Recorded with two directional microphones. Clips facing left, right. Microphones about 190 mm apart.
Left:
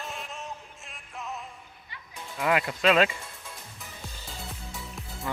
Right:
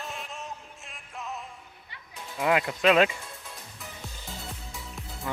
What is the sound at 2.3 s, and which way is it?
Speech, 15° right (ahead or behind).